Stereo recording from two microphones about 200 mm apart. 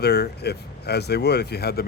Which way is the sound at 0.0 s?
55° left (ahead or behind).